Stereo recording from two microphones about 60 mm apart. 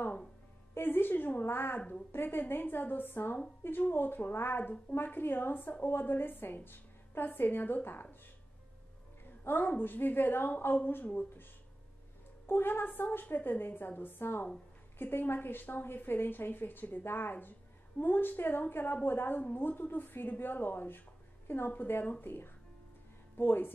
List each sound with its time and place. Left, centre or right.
0.7 s a woman's voice: left
9.4 s a woman's voice: left
12.4 s a woman's voice: left